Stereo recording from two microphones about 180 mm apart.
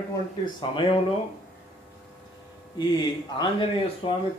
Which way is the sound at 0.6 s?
30° left (ahead or behind).